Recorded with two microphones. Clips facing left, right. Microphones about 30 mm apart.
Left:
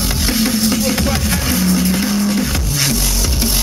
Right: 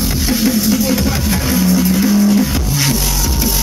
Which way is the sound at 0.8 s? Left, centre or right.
Centre.